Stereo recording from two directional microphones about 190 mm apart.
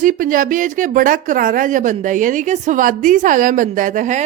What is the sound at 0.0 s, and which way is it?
Speech, 45° right (ahead or behind).